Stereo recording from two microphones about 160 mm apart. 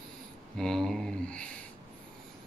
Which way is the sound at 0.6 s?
5° left (ahead or behind).